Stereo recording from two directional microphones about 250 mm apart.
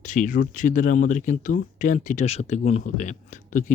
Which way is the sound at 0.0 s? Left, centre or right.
Left.